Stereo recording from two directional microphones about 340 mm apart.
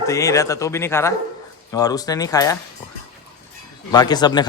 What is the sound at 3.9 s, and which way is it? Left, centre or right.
Speech, centre.